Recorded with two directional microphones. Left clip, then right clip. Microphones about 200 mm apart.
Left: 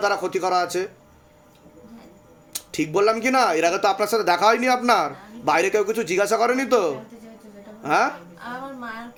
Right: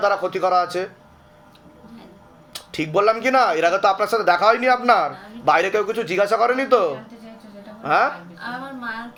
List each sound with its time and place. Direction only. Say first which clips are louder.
0.0 s speech: right 3 dB; 45° left (ahead or behind)
2.7 s speech: right 2 dB; 40° left (ahead or behind)